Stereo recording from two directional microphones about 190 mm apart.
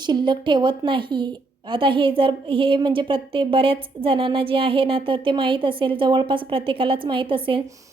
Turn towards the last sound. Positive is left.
turn(degrees=-25)  # may be behind; listen again after turning